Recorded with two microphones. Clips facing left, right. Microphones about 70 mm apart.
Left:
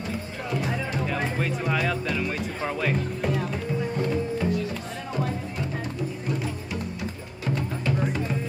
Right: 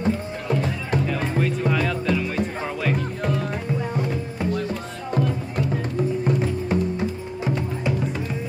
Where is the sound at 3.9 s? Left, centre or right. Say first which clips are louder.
Even; centre.